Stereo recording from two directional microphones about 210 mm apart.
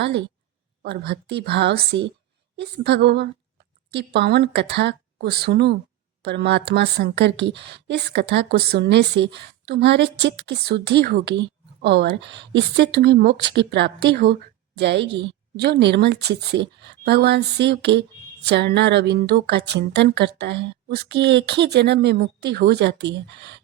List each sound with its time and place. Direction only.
0.0 s a woman's voice: 55° right (ahead or behind)